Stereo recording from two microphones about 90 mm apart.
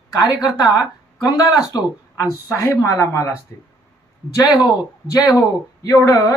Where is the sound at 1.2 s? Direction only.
45° left (ahead or behind).